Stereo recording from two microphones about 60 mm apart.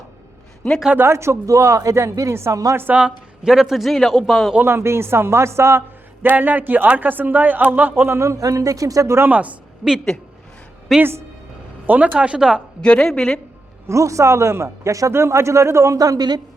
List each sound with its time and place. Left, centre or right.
0.9 s speech: right
2.5 s a man's voice: right
2.7 s a man's voice: right
3.4 s a man's voice: centre
4.6 s speech: right
6.2 s a man's voice: right
8.1 s a man's voice: right
9.3 s speech: right
10.9 s a man's voice: centre
11.9 s speech: right
12.1 s speech: centre
12.8 s a woman's voice: centre
13.8 s a man's voice: right
15.1 s a man's voice: right